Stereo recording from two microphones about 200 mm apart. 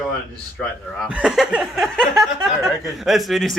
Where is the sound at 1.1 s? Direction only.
5° right (ahead or behind).